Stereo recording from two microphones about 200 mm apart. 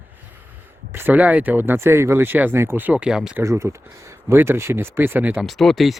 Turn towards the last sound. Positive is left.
turn(degrees=0)  # may be behind; listen again after turning